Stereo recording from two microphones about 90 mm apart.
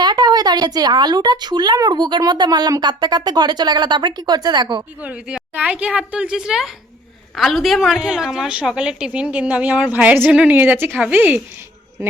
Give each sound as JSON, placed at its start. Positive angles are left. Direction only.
{"t": 0.0, "sound": "speech", "side_deg": -50}
{"t": 4.9, "sound": "a woman's voice", "side_deg": -15}